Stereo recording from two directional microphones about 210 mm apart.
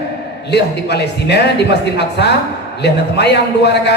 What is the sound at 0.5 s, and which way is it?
A man's voice, 50° left (ahead or behind).